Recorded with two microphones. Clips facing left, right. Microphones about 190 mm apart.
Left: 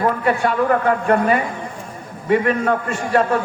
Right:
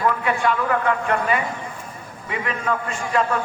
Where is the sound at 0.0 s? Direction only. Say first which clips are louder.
Left 3 dB; 40° left (ahead or behind).